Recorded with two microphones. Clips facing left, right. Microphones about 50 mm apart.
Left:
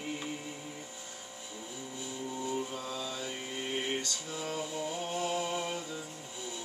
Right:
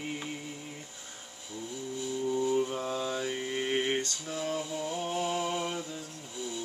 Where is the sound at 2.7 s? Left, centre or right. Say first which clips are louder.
Right 6 dB; right.